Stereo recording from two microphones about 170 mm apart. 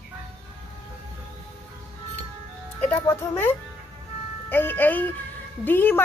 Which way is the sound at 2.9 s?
15° left (ahead or behind).